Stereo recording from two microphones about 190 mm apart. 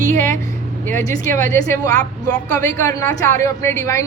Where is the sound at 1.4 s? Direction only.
15° left (ahead or behind).